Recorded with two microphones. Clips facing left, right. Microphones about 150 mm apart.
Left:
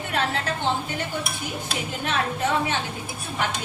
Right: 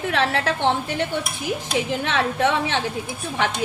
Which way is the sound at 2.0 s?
90° right.